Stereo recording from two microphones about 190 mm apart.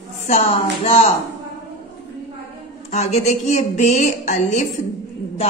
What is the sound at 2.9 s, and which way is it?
Speech, 35° left (ahead or behind).